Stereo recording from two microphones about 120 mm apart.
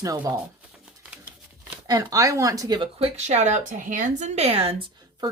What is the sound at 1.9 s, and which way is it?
Speech, 30° right (ahead or behind).